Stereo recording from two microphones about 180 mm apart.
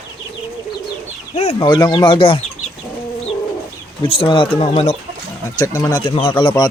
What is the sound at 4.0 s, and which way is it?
Speech, 30° left (ahead or behind).